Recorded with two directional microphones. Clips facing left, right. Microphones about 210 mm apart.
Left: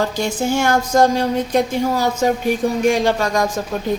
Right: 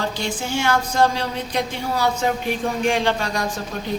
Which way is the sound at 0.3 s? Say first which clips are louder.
Left 6 dB; 45° left (ahead or behind).